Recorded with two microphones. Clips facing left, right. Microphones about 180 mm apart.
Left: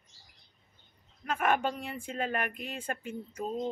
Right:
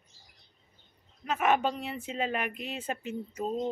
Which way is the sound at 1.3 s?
5° right (ahead or behind).